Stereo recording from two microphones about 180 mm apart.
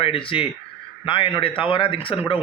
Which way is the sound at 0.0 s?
30° left (ahead or behind).